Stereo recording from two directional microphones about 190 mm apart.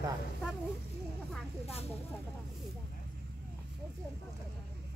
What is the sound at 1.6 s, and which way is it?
Speech, 35° left (ahead or behind).